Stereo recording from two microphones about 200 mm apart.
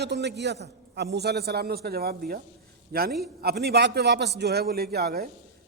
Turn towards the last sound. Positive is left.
turn(degrees=-50)  # may be behind; listen again after turning